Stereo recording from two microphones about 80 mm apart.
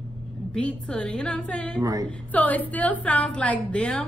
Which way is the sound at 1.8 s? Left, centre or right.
Right.